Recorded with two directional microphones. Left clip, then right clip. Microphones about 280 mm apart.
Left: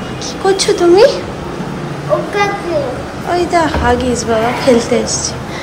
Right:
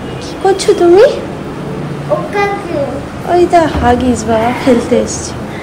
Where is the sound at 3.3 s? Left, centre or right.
Centre.